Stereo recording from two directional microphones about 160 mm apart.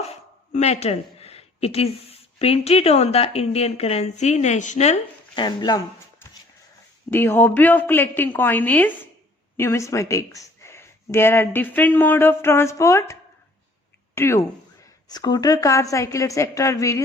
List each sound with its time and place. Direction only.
0.1 s speech: 40° left (ahead or behind)
5.3 s a woman's voice: 25° left (ahead or behind)
7.1 s speech: 15° left (ahead or behind)
14.2 s a woman's voice: 15° left (ahead or behind)